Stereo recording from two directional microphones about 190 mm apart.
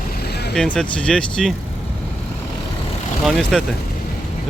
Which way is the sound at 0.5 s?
5° left (ahead or behind).